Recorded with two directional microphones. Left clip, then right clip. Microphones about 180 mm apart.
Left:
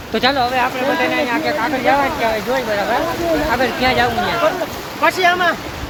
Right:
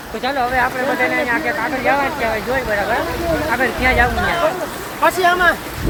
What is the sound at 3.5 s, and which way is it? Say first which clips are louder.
Speech: right 3 dB; 15° left (ahead or behind).